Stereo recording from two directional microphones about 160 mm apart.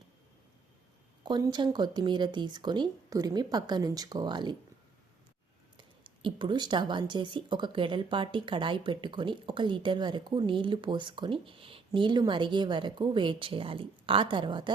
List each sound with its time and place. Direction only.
1.2 s speech: 30° right (ahead or behind)
6.2 s speech: 30° right (ahead or behind)